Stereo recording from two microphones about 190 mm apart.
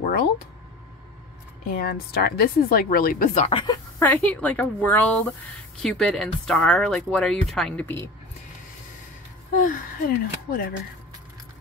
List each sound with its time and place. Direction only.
1.8 s a woman's voice: 55° left (ahead or behind)
3.3 s speech: 30° left (ahead or behind)
4.0 s a woman's voice: 10° left (ahead or behind)
9.7 s a woman's voice: 50° left (ahead or behind)